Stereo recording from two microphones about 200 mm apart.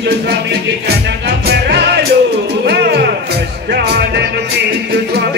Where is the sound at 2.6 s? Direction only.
55° right (ahead or behind).